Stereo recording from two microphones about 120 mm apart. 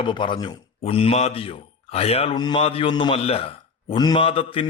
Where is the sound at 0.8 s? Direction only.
55° left (ahead or behind).